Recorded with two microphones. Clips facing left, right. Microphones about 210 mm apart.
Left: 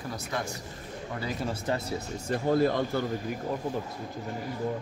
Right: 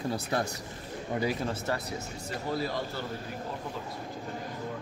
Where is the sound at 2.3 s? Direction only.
50° left (ahead or behind).